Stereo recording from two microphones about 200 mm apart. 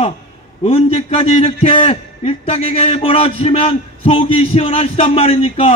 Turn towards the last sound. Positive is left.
turn(degrees=30)  # may be behind; listen again after turning